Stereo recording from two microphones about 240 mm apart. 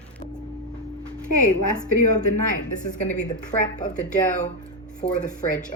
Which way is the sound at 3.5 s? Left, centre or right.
Left.